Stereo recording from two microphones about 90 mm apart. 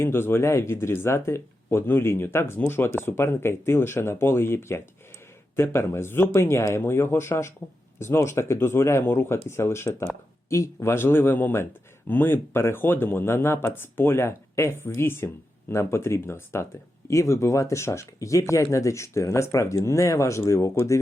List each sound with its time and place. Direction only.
0.0 s speech: 25° left (ahead or behind)